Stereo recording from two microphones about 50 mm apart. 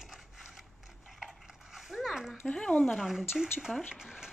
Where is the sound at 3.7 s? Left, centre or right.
Left.